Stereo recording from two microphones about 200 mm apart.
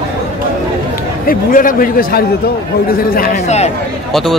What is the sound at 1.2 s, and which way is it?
A man's voice, 45° left (ahead or behind).